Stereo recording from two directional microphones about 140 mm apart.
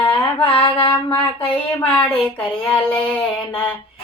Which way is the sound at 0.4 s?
45° left (ahead or behind).